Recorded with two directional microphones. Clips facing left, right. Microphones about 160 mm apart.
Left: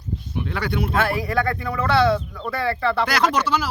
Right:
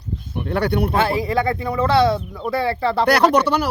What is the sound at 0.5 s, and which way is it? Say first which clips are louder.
Speech: right 7 dB; 60° right (ahead or behind).